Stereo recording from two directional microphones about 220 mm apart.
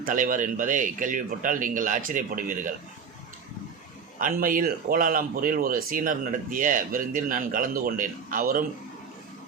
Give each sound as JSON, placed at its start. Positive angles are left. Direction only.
{"t": 0.0, "sound": "speech", "side_deg": -40}
{"t": 4.2, "sound": "speech", "side_deg": -40}